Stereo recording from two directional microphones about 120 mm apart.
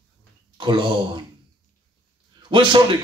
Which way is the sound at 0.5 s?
40° right (ahead or behind).